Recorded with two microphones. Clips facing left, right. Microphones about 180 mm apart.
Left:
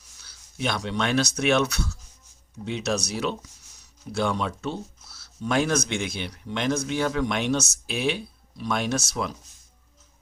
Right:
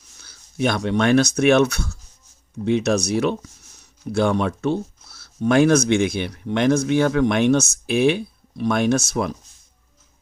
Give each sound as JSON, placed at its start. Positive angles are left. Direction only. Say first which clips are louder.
{"t": 0.2, "sound": "speech", "louder": "right 8 dB", "side_deg": -50}